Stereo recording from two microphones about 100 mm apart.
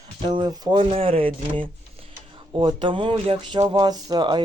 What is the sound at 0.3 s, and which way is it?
Speech, 45° right (ahead or behind).